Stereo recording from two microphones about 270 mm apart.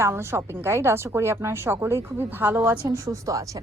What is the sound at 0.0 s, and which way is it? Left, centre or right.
A woman's voice, centre.